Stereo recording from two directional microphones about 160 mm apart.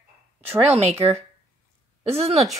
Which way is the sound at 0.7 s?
45° right (ahead or behind).